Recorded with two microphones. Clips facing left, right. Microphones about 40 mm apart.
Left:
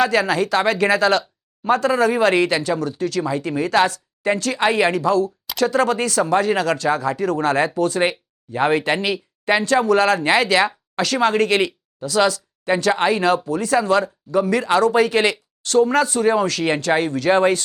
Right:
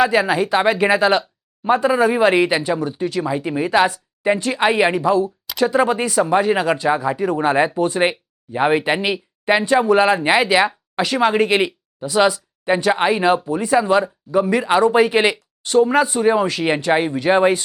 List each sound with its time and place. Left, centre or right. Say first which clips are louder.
0.0 s speech: right 2 dB; centre